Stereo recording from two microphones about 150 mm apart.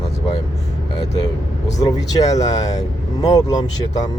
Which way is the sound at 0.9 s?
25° left (ahead or behind).